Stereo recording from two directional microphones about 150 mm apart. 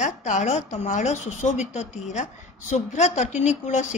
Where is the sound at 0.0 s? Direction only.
55° left (ahead or behind).